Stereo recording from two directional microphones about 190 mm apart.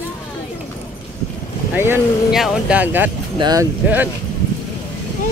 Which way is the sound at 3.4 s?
20° right (ahead or behind).